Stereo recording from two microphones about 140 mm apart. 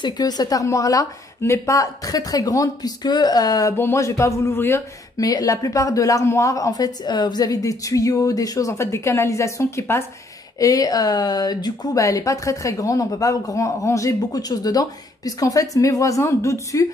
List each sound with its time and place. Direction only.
0.0 s speech: 30° left (ahead or behind)